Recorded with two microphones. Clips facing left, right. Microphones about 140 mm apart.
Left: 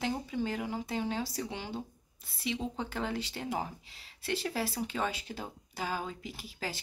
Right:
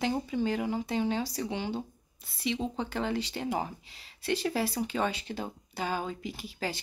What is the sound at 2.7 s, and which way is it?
Speech, centre (ahead or behind).